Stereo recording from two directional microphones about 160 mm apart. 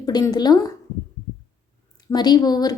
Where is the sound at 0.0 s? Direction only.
25° left (ahead or behind).